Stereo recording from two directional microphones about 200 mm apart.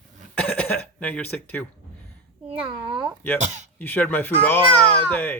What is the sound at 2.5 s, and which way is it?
Speech, 25° right (ahead or behind).